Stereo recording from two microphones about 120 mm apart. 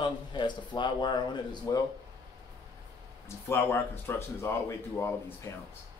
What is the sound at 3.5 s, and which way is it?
Speech, 20° left (ahead or behind).